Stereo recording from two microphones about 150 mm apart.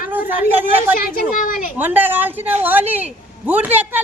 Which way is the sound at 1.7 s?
10° right (ahead or behind).